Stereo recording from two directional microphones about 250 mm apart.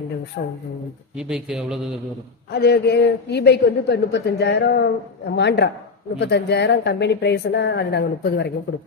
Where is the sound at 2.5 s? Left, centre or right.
Left.